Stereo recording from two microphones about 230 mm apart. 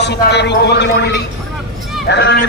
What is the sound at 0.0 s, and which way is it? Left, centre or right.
Speech, left.